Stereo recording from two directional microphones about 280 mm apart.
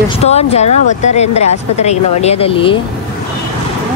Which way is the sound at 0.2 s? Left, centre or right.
Left.